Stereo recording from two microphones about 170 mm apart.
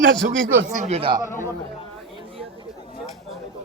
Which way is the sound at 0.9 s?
30° right (ahead or behind).